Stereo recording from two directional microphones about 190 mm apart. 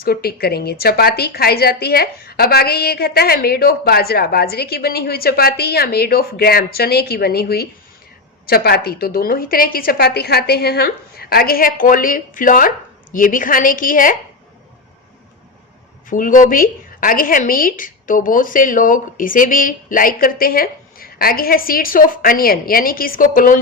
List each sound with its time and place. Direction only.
0.0 s a woman's voice: 55° left (ahead or behind)
16.0 s a woman's voice: 45° left (ahead or behind)